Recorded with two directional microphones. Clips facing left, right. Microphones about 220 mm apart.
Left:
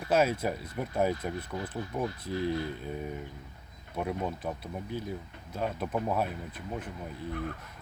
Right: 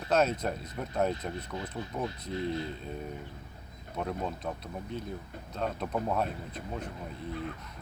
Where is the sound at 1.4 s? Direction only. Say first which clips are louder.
Left 2 dB; 20° right (ahead or behind).